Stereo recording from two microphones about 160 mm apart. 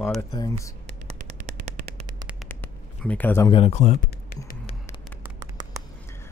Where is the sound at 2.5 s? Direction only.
10° left (ahead or behind).